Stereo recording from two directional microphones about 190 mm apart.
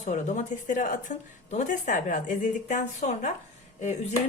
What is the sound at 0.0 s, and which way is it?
A woman's voice, 40° left (ahead or behind).